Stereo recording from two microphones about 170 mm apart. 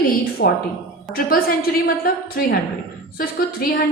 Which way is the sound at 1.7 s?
60° left (ahead or behind).